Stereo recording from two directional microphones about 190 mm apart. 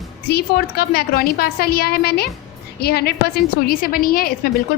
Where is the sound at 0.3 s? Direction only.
55° left (ahead or behind).